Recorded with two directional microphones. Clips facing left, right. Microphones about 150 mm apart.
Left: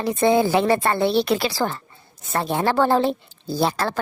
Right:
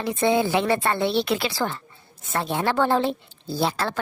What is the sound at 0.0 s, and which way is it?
Speech, 40° left (ahead or behind).